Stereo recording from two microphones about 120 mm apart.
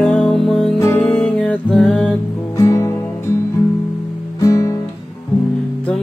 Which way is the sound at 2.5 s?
25° left (ahead or behind).